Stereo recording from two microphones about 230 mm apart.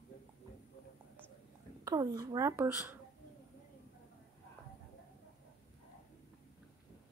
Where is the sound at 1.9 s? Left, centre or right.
Centre.